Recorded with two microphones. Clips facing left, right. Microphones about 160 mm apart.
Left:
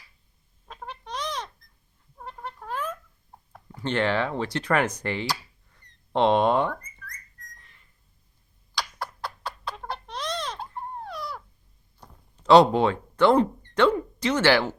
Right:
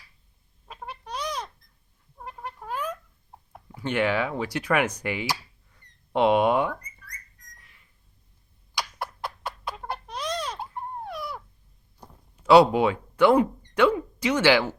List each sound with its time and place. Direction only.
0.7 s bird: 5° right (ahead or behind)
2.1 s cat: 5° right (ahead or behind)
3.8 s speech: 10° right (ahead or behind)
4.9 s a sound: 10° right (ahead or behind)
6.8 s whistling: 10° right (ahead or behind)
9.0 s horse: 20° right (ahead or behind)
9.7 s a sound: 5° right (ahead or behind)
12.1 s speech: 10° right (ahead or behind)